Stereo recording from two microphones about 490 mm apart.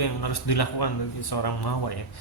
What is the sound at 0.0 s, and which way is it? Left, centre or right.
Speech, left.